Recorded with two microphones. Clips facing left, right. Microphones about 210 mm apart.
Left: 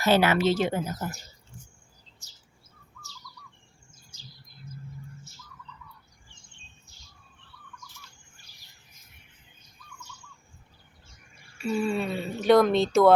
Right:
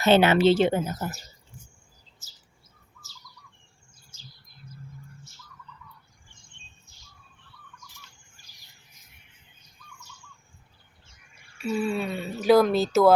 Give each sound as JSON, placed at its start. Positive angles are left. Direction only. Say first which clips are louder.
{"t": 0.0, "sound": "speech", "louder": "right 4 dB", "side_deg": -25}
{"t": 2.2, "sound": "bird", "louder": "even", "side_deg": -5}
{"t": 4.1, "sound": "bird", "louder": "even", "side_deg": 15}
{"t": 11.5, "sound": "speech", "louder": "even", "side_deg": 0}